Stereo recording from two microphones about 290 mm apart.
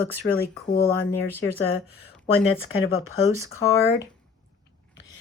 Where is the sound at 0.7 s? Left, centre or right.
Left.